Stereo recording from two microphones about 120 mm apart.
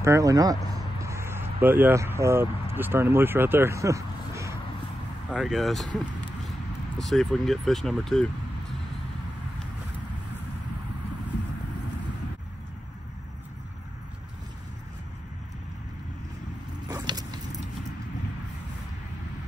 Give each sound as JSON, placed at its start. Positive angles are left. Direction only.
{"t": 0.0, "sound": "speech", "side_deg": -25}
{"t": 5.3, "sound": "speech", "side_deg": 0}
{"t": 5.9, "sound": "a sound", "side_deg": 5}
{"t": 7.0, "sound": "speech", "side_deg": 5}
{"t": 16.8, "sound": "vehicle", "side_deg": -35}